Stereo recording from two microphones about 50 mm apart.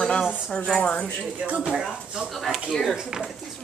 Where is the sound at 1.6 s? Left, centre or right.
Centre.